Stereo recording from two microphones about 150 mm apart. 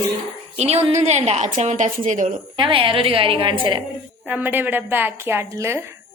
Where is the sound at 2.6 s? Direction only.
35° right (ahead or behind).